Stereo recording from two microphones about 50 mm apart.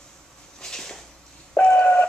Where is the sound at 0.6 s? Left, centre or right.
Centre.